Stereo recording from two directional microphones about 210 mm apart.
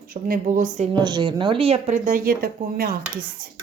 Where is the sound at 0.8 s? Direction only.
20° right (ahead or behind); by 2.9 s 45° right (ahead or behind).